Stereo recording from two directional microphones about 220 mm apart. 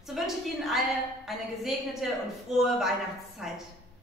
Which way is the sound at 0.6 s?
Centre (ahead or behind).